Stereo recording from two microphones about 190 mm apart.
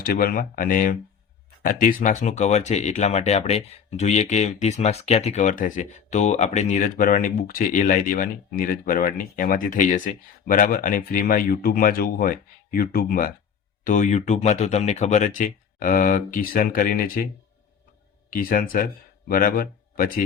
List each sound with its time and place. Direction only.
0.0 s speech: 50° left (ahead or behind)
18.3 s speech: 50° left (ahead or behind)